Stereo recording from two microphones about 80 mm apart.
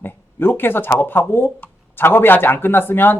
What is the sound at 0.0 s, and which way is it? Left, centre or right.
Speech, left.